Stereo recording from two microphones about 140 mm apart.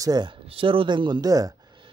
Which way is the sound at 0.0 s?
30° right (ahead or behind).